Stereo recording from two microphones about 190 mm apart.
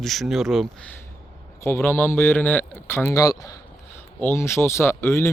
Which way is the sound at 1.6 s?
10° left (ahead or behind).